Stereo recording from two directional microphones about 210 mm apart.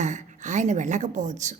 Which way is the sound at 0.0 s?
35° right (ahead or behind).